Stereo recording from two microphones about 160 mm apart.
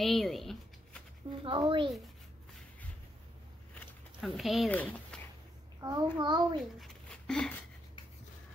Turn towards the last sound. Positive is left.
turn(degrees=5)  # may be behind; listen again after turning